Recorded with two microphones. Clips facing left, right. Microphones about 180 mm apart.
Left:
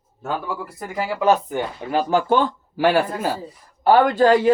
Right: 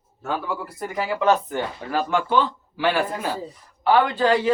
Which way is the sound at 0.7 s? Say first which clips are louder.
Even; 5° left (ahead or behind).